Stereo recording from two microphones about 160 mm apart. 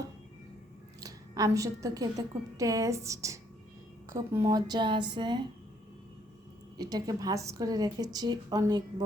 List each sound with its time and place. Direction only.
1.0 s a woman's voice: 20° right (ahead or behind)
6.7 s a woman's voice: 25° right (ahead or behind)